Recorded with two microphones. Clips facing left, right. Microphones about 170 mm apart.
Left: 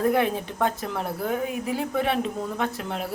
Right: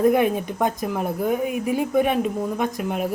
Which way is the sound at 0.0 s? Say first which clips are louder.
Right 4 dB; 15° right (ahead or behind).